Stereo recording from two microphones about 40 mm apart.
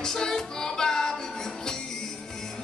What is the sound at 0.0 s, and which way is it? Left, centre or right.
Female singing, centre.